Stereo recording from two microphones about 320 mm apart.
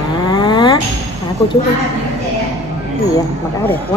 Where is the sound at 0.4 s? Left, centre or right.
Centre.